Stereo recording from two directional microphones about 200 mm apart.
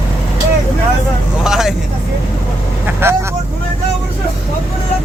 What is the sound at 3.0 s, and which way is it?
Speech, 10° right (ahead or behind).